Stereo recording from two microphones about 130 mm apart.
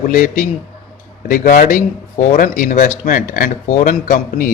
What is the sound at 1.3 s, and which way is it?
Speech, 90° left.